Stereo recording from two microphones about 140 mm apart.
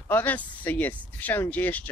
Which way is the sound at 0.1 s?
15° left (ahead or behind).